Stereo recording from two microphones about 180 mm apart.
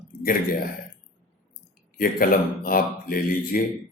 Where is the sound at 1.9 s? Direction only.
55° left (ahead or behind).